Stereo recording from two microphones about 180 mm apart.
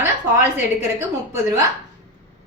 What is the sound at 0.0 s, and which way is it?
A woman's voice, 15° right (ahead or behind).